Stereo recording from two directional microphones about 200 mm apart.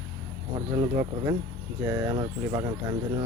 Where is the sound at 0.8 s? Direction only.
20° right (ahead or behind).